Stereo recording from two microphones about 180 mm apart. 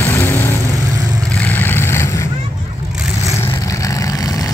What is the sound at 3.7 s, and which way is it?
Vehicle, 15° left (ahead or behind).